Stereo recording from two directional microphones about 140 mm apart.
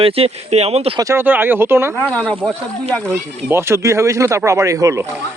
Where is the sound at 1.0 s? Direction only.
20° right (ahead or behind).